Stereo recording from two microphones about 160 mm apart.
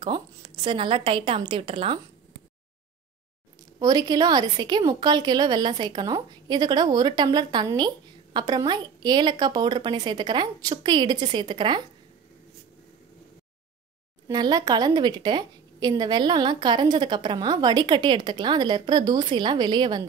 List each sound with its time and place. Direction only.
0.0 s a woman's voice: 30° right (ahead or behind)
3.8 s a woman's voice: 25° right (ahead or behind)
14.2 s a woman's voice: 25° right (ahead or behind)